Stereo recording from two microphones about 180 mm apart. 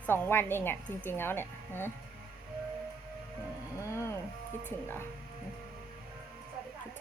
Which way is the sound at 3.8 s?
15° left (ahead or behind).